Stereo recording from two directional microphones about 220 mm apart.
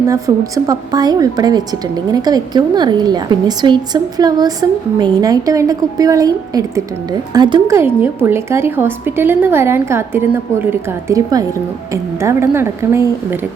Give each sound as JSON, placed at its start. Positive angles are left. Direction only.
{"t": 0.1, "sound": "a woman's voice", "side_deg": -15}